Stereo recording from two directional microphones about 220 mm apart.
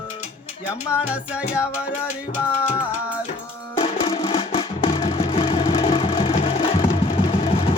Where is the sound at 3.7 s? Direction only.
25° left (ahead or behind).